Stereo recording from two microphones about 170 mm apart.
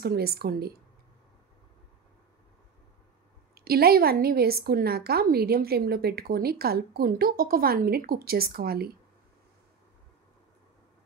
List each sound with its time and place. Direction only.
0.0 s a woman's voice: 65° right (ahead or behind)
3.5 s a woman's voice: 65° right (ahead or behind)